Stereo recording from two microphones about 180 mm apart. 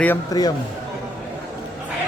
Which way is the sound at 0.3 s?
20° left (ahead or behind).